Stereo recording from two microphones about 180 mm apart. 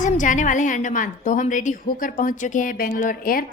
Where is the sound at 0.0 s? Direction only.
45° left (ahead or behind).